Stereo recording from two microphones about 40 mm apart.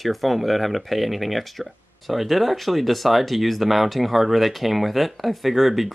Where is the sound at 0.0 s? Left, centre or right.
Centre.